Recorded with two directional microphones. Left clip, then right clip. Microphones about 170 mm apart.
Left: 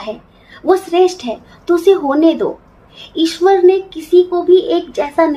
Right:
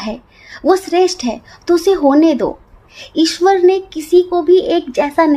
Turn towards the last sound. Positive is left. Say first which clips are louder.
# right 1 dB
turn(degrees=-65)  # may be behind; listen again after turning